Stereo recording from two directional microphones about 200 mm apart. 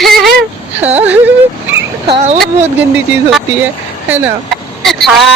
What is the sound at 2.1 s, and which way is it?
Speech, 30° right (ahead or behind).